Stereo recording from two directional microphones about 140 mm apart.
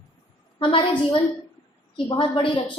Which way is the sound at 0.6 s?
35° left (ahead or behind).